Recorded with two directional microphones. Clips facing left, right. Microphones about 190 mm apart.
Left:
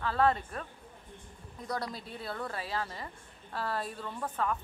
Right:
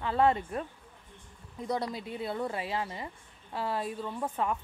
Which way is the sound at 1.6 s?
20° right (ahead or behind).